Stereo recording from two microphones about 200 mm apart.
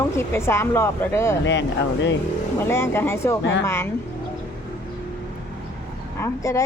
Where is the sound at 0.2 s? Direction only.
15° left (ahead or behind).